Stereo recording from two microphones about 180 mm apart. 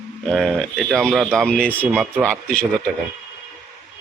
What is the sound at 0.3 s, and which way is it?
Speech, 5° left (ahead or behind).